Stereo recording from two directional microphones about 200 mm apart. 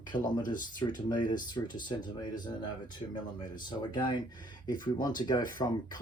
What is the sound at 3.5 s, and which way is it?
Speech, 20° left (ahead or behind).